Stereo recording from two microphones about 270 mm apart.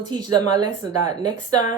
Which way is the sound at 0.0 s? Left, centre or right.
Centre.